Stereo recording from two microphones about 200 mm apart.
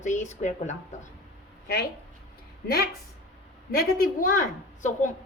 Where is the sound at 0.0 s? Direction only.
35° left (ahead or behind).